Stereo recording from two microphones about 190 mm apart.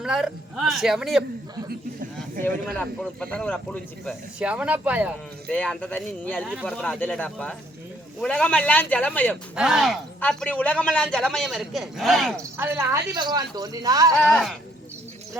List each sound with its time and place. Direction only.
0.0 s speech: 5° right (ahead or behind)
2.6 s speech: 5° left (ahead or behind)
5.5 s a man's voice: 5° left (ahead or behind)
9.3 s speech: 5° right (ahead or behind)
12.4 s speech: 15° right (ahead or behind)
14.3 s speech: centre (ahead or behind)